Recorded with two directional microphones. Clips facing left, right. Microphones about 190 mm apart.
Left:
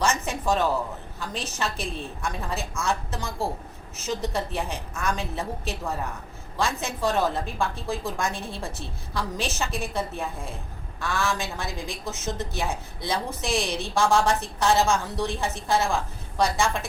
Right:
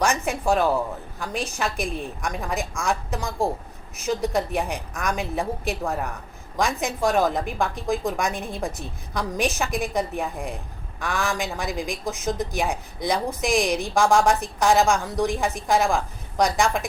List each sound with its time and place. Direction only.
0.0 s a woman's voice: 15° right (ahead or behind)